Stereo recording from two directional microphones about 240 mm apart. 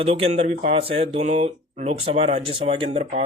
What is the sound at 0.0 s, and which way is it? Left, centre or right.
Speech, right.